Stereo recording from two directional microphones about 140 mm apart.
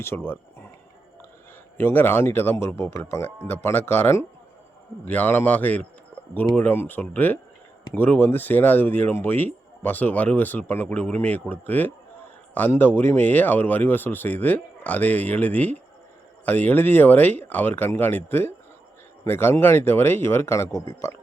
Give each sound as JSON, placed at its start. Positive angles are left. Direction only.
{"t": 0.0, "sound": "speech", "side_deg": 15}
{"t": 1.8, "sound": "speech", "side_deg": 15}